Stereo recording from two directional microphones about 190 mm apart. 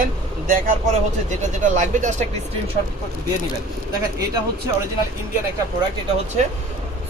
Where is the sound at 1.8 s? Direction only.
40° right (ahead or behind).